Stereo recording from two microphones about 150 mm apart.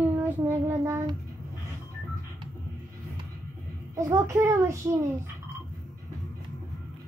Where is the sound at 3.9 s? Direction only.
20° right (ahead or behind).